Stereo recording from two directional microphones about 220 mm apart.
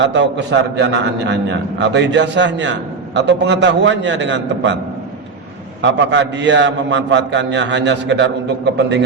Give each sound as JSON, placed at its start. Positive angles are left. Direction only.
{"t": 0.0, "sound": "a man's voice", "side_deg": -55}
{"t": 5.8, "sound": "a man's voice", "side_deg": -55}